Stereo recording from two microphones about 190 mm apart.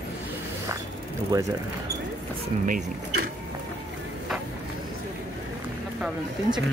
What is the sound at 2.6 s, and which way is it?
Speech, 45° right (ahead or behind).